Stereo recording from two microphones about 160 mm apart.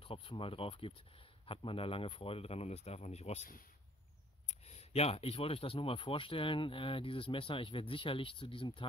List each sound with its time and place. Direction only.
0.0 s speech: 35° left (ahead or behind)
4.5 s speech: 40° left (ahead or behind)